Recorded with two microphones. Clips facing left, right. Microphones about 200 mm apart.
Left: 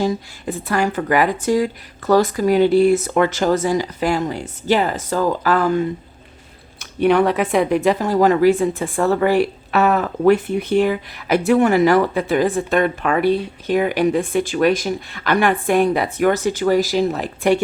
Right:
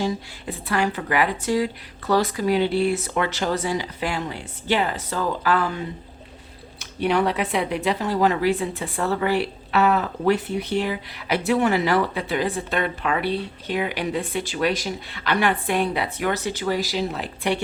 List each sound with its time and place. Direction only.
0.0 s speech: 45° left (ahead or behind)